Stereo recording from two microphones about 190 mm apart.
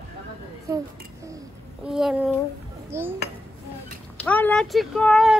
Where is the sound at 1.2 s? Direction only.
15° right (ahead or behind).